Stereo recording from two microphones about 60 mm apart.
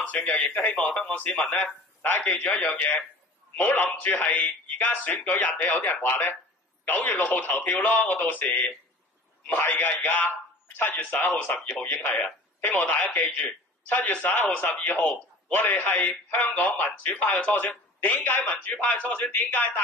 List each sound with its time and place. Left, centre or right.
0.2 s a man's voice: left